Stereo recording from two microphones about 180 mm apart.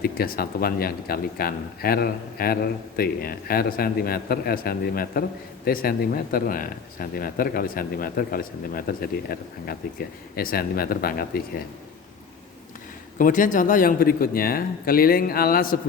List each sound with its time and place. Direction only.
0.0 s speech: 55° left (ahead or behind)
13.1 s speech: 45° left (ahead or behind)